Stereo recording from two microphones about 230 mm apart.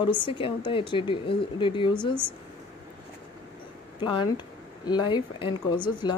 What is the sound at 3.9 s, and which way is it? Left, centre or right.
Speech, left.